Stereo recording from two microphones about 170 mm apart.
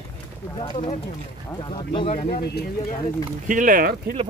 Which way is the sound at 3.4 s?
50° right (ahead or behind).